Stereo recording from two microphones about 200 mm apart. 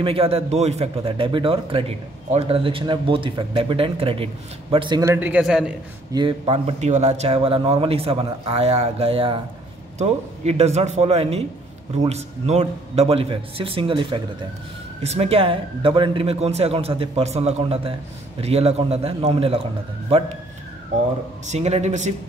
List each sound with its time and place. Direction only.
0.0 s a man's voice: 30° right (ahead or behind); by 5.8 s 5° right (ahead or behind)
6.1 s a man's voice: 25° right (ahead or behind)
21.5 s a man's voice: 35° right (ahead or behind)